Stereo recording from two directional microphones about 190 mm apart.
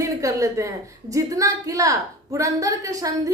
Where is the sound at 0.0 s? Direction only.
15° right (ahead or behind).